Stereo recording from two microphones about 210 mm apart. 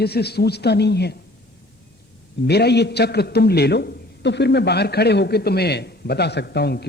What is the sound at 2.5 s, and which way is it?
A man's voice, 50° left (ahead or behind).